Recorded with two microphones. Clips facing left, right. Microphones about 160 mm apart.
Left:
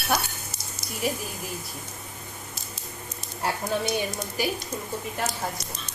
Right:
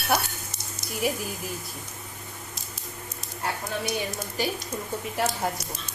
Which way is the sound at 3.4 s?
30° left (ahead or behind).